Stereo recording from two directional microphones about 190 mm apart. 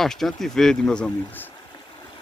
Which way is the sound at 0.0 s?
Centre (ahead or behind).